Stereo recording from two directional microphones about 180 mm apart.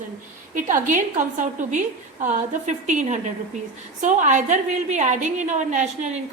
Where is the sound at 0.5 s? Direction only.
45° right (ahead or behind).